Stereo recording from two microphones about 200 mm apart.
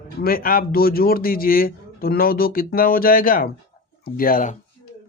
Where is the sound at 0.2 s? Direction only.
45° left (ahead or behind).